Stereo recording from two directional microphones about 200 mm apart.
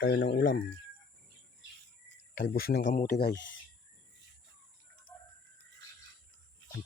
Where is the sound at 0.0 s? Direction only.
70° left (ahead or behind).